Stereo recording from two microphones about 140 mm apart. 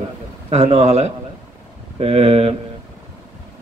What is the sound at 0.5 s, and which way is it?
A man's voice, 50° right (ahead or behind).